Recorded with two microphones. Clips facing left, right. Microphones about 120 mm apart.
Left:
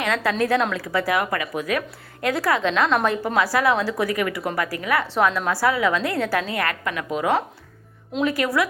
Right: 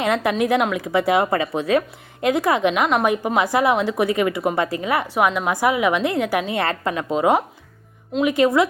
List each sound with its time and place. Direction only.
0.0 s a woman's voice: 20° right (ahead or behind)